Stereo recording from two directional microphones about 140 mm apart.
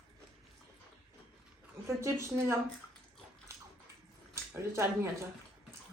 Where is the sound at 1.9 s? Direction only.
20° right (ahead or behind).